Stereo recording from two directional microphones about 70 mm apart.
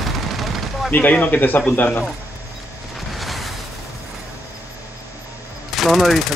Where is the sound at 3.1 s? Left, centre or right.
Centre.